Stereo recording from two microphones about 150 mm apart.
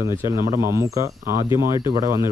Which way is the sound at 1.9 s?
25° right (ahead or behind).